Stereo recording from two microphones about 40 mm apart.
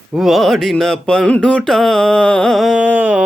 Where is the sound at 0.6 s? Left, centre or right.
Centre.